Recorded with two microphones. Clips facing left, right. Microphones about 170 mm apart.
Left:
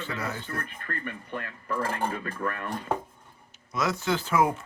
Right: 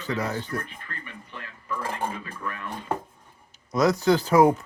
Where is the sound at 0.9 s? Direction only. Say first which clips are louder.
Left 6 dB; 50° left (ahead or behind).